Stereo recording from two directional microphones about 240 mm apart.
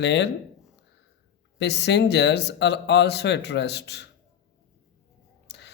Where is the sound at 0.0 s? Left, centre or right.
Left.